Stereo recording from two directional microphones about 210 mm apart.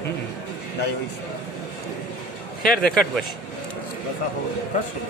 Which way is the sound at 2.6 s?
5° left (ahead or behind).